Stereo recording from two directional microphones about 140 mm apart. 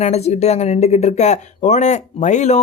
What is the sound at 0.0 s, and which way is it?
Speech, 50° left (ahead or behind).